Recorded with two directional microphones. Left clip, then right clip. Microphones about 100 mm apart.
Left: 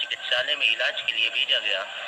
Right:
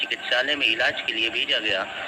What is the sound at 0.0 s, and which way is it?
Speech, 30° right (ahead or behind).